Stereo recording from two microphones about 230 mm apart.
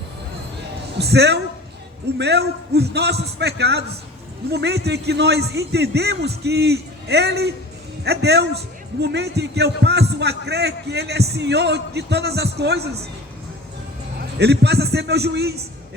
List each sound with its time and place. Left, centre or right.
0.9 s a man's voice: right
14.2 s a man's voice: right